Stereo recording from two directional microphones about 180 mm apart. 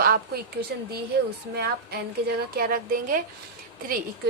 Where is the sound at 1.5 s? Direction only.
65° right (ahead or behind).